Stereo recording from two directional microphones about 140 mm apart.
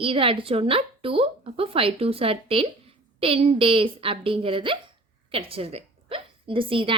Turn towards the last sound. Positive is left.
turn(degrees=-35)  # may be behind; listen again after turning